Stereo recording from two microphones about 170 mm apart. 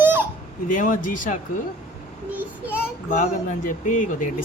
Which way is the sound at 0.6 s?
50° left (ahead or behind).